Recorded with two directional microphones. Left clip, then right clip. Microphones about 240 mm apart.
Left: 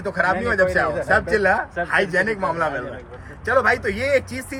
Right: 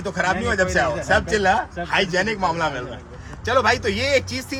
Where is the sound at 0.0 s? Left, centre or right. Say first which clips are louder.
Left 1 dB; centre.